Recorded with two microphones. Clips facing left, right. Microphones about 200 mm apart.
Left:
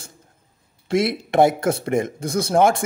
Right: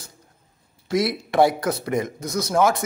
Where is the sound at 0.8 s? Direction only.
25° left (ahead or behind).